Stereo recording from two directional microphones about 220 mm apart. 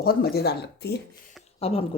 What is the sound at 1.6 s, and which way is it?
Speech, 25° left (ahead or behind).